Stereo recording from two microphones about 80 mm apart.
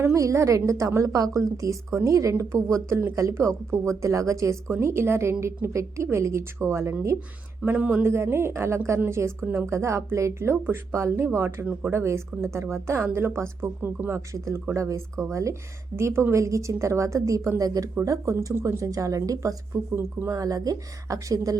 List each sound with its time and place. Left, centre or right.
0.0 s a woman's voice: right
4.8 s speech: right
7.6 s speech: centre
8.0 s speech: right
9.7 s speech: right
11.6 s speech: centre
11.9 s speech: right
14.3 s a woman's voice: right